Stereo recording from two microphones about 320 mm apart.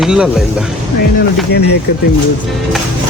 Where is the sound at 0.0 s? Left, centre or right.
Centre.